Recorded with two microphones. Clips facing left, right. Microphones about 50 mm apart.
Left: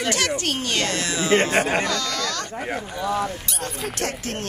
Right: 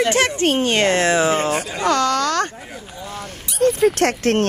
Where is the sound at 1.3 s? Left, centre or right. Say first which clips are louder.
Left 2 dB; left.